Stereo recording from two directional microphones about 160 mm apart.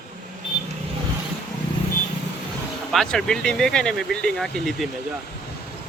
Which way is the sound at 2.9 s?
Centre (ahead or behind).